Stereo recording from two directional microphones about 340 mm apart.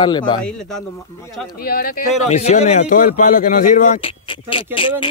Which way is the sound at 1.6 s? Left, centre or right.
Left.